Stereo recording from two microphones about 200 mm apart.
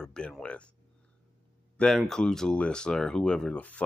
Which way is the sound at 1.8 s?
Centre (ahead or behind).